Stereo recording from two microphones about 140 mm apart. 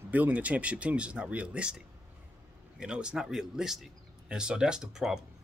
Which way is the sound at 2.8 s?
5° right (ahead or behind).